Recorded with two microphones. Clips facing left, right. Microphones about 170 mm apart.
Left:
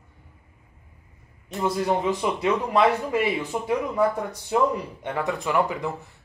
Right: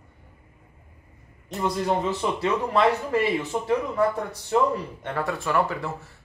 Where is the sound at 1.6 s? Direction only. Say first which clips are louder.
Left 1 dB; 10° left (ahead or behind).